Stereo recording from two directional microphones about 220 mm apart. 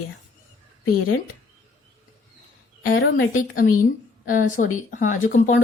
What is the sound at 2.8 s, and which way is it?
Speech, 60° left (ahead or behind).